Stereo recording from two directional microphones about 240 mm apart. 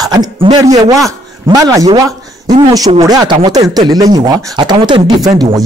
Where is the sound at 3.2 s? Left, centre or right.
Centre.